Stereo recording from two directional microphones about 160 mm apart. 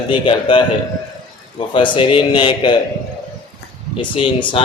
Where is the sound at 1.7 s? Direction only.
30° left (ahead or behind).